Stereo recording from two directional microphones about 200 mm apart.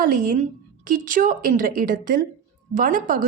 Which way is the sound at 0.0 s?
45° right (ahead or behind).